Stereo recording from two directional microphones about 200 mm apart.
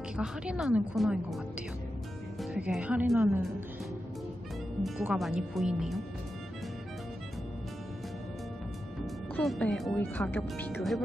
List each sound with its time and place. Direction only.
0.2 s a woman's voice: 5° right (ahead or behind)
2.5 s speech: 5° right (ahead or behind)
4.8 s a woman's voice: centre (ahead or behind)
9.4 s speech: 5° left (ahead or behind)